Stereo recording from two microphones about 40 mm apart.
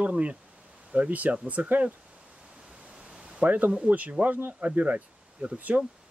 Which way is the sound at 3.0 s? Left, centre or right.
Right.